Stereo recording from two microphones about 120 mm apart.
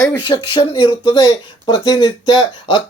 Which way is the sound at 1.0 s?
35° left (ahead or behind).